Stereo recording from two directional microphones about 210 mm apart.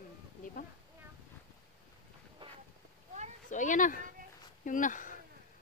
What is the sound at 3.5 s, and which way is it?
Speech, 35° left (ahead or behind).